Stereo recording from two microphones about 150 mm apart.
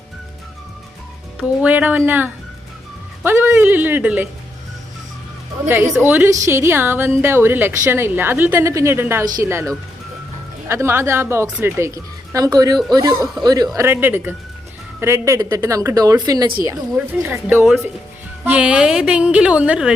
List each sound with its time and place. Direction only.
1.4 s a woman's voice: 10° right (ahead or behind)
5.6 s a woman's voice: 15° right (ahead or behind)
13.7 s a woman's voice: 15° right (ahead or behind)
17.1 s a woman's voice: 10° right (ahead or behind)